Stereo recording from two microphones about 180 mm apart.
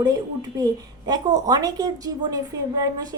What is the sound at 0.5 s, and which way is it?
A woman's voice, 20° right (ahead or behind).